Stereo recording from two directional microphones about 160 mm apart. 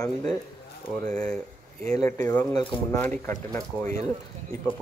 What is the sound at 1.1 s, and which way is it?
Speech, 5° left (ahead or behind).